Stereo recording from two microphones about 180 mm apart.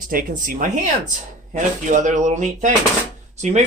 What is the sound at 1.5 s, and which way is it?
Speech, 45° right (ahead or behind).